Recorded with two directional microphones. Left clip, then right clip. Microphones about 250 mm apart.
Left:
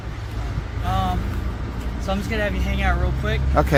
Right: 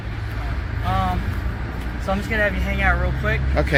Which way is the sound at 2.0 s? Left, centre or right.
Centre.